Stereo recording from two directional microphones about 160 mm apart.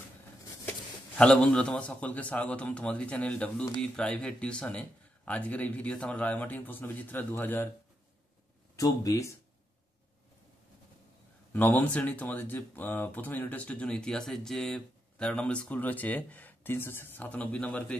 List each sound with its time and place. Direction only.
0.7 s a man's voice: 5° left (ahead or behind)
8.7 s speech: 20° left (ahead or behind)
11.5 s a man's voice: 10° left (ahead or behind)